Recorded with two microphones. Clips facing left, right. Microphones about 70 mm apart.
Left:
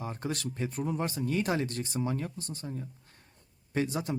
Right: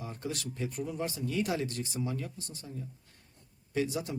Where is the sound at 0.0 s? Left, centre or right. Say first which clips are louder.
Left 3 dB; left.